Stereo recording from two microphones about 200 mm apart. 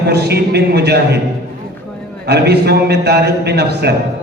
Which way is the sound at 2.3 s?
55° right (ahead or behind).